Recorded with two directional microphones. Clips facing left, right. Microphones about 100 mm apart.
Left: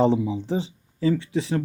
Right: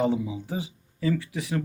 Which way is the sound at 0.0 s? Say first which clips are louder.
Left 5 dB; 25° left (ahead or behind).